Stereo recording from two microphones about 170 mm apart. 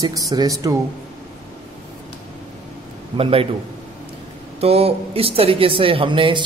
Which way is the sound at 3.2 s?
35° right (ahead or behind).